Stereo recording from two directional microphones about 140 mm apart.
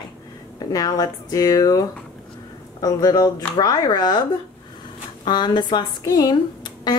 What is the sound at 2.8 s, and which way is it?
Speech, 25° left (ahead or behind).